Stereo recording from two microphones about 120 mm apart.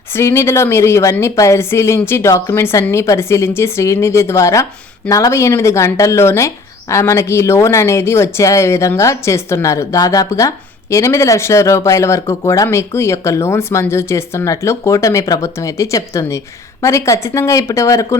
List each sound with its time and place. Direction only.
0.1 s speech: 20° left (ahead or behind)